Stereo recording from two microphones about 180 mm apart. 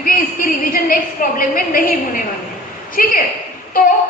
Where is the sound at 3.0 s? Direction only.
50° left (ahead or behind).